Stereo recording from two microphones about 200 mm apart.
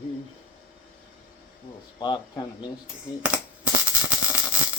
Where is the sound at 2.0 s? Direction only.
20° left (ahead or behind).